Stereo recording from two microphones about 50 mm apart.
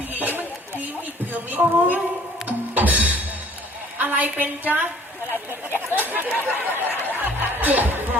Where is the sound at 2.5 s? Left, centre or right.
Right.